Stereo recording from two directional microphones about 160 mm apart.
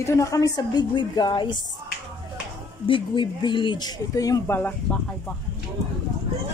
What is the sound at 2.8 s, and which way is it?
Speech, 30° left (ahead or behind).